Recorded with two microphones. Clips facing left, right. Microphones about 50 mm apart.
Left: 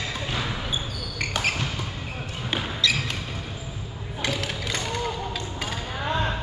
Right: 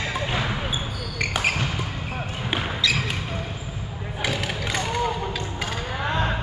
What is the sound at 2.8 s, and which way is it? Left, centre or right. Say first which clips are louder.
Basketball bounce: even; centre.